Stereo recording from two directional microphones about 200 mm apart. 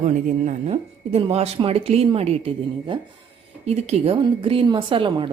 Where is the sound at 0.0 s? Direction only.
35° right (ahead or behind).